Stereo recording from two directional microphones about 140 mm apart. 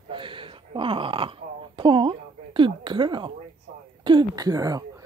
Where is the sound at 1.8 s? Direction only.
35° right (ahead or behind).